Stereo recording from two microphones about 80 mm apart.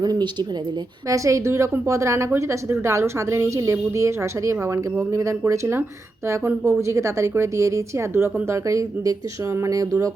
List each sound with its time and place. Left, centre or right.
0.0 s speech: right
1.0 s a woman's voice: right
6.5 s speech: right
6.7 s a woman's voice: right